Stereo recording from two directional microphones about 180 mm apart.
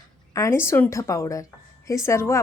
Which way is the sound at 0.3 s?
15° left (ahead or behind).